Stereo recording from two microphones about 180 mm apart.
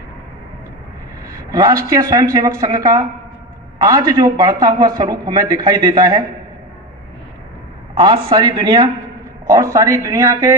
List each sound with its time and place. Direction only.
1.2 s a man's voice: 20° right (ahead or behind)
7.9 s a man's voice: 30° right (ahead or behind)